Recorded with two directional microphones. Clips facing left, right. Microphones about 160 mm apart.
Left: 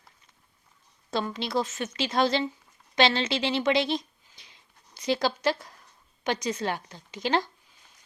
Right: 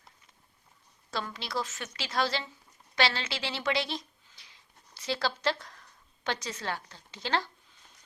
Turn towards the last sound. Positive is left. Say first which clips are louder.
# left 5 dB
turn(degrees=15)  # may be behind; listen again after turning